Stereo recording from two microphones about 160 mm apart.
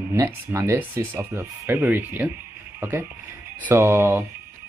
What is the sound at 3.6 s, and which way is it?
Speech, 15° right (ahead or behind).